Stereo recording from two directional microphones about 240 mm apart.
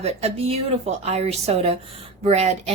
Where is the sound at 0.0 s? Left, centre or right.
Right.